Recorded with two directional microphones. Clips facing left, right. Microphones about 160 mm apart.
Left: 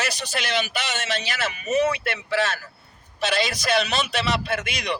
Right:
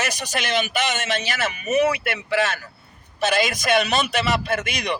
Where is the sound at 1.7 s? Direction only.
10° right (ahead or behind).